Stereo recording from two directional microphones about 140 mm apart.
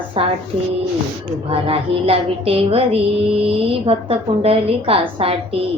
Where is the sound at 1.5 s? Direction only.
40° right (ahead or behind).